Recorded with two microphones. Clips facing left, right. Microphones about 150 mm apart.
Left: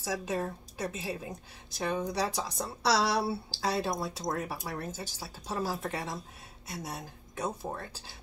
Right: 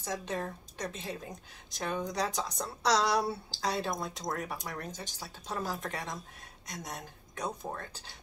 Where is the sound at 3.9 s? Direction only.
5° left (ahead or behind).